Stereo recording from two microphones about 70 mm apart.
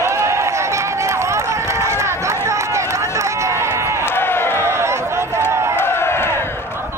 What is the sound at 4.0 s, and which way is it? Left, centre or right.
Run, left.